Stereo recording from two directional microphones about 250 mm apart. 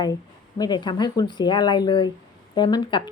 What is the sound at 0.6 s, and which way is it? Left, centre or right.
A woman's voice, centre.